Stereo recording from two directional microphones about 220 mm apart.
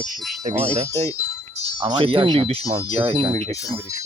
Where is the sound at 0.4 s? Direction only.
30° right (ahead or behind).